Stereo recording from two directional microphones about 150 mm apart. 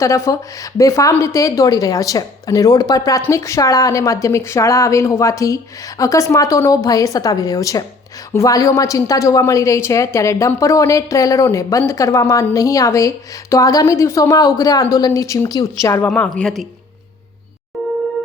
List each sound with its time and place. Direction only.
0.0 s a woman's voice: 20° left (ahead or behind)
16.0 s a woman's voice: 5° left (ahead or behind)